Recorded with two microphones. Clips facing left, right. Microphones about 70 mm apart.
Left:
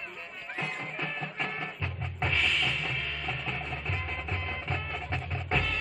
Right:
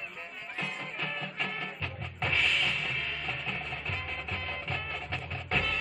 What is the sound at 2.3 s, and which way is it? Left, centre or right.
Music, centre.